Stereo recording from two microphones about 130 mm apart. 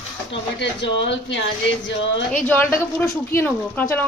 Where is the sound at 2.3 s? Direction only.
15° left (ahead or behind).